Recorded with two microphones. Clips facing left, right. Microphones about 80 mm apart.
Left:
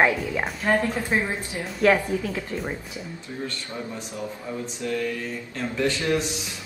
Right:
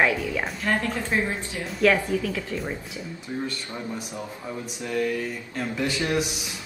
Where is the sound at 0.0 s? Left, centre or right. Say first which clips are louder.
Left 1 dB; left.